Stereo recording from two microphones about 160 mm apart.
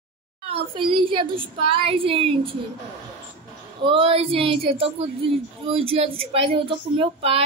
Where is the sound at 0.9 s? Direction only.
30° right (ahead or behind).